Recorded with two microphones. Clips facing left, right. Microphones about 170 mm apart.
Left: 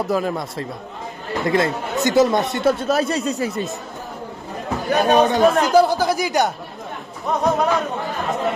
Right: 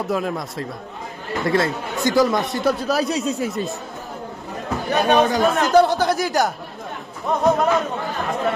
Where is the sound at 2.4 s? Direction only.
Centre (ahead or behind).